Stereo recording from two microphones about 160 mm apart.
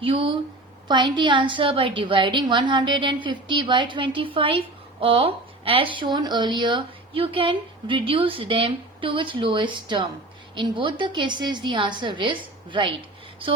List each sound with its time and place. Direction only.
0.0 s a woman's voice: 35° right (ahead or behind)